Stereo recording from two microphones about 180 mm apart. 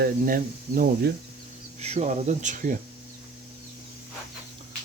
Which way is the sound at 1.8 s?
40° right (ahead or behind).